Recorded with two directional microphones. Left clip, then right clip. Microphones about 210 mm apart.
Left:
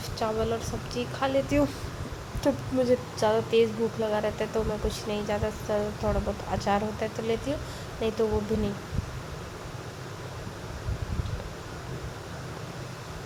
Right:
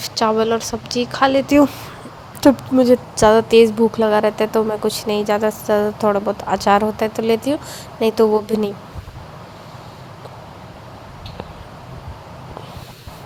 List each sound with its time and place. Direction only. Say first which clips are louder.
0.0 s speech: right 12 dB; 45° right (ahead or behind)